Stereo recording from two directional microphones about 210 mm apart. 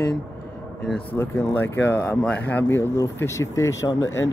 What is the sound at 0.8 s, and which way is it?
Speech, 10° left (ahead or behind).